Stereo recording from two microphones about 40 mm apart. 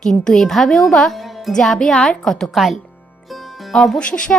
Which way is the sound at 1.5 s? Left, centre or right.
Centre.